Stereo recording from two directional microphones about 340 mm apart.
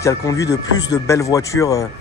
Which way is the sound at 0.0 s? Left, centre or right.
Centre.